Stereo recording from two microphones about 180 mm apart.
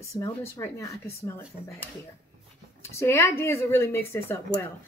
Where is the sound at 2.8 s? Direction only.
15° left (ahead or behind).